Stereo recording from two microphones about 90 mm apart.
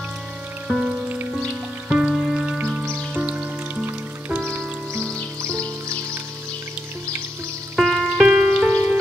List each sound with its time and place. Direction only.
0.7 s music: 5° right (ahead or behind)
1.0 s music: 20° right (ahead or behind)
1.9 s music: 10° right (ahead or behind)
7.7 s music: centre (ahead or behind)